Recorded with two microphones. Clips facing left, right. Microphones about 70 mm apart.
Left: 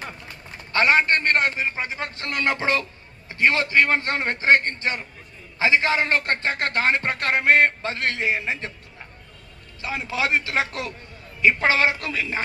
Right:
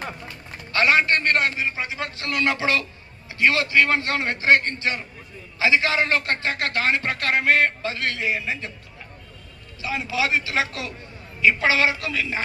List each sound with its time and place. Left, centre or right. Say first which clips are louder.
0.7 s a man's voice: even; left
9.8 s a man's voice: right 1 dB; left